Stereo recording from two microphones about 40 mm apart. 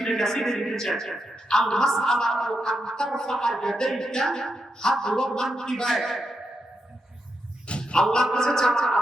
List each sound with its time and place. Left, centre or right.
0.0 s music: centre
1.5 s music: centre
7.7 s a sound: left
8.3 s music: centre